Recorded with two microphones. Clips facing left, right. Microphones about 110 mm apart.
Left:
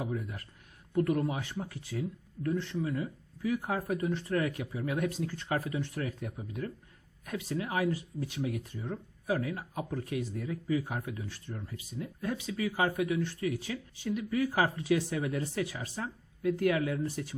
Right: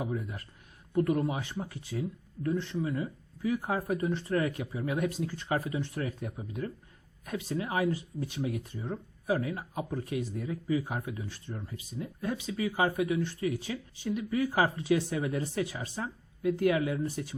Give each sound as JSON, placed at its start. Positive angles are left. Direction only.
{"t": 0.0, "sound": "speech", "side_deg": -20}